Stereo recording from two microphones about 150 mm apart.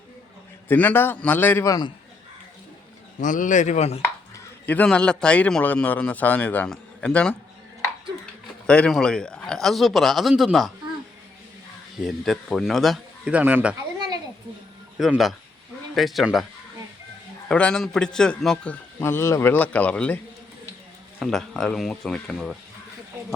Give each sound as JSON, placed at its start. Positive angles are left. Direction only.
{"t": 0.7, "sound": "a man's voice", "side_deg": 10}
{"t": 3.2, "sound": "speech", "side_deg": 60}
{"t": 4.6, "sound": "a man's voice", "side_deg": 10}
{"t": 8.6, "sound": "speech", "side_deg": 5}
{"t": 12.0, "sound": "speech", "side_deg": 0}
{"t": 13.3, "sound": "speech", "side_deg": -10}
{"t": 14.9, "sound": "speech", "side_deg": 0}
{"t": 17.5, "sound": "a man's voice", "side_deg": 5}
{"t": 21.2, "sound": "speech", "side_deg": 0}